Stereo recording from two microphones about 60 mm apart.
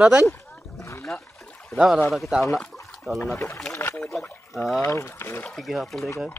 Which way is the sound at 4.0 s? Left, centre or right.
Centre.